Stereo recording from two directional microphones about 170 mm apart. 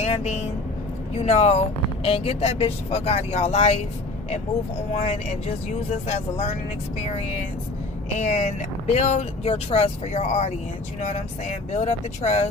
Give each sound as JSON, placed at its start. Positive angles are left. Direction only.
{"t": 0.0, "sound": "speech", "side_deg": 40}
{"t": 5.0, "sound": "speech", "side_deg": 40}
{"t": 8.2, "sound": "speech", "side_deg": 45}